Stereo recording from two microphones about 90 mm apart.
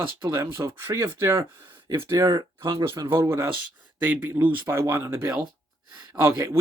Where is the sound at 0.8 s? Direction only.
30° right (ahead or behind).